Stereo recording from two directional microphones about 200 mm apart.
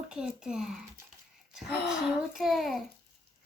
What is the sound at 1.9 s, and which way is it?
Speech, centre (ahead or behind).